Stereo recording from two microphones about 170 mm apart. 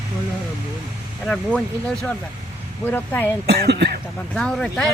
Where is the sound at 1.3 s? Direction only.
5° left (ahead or behind).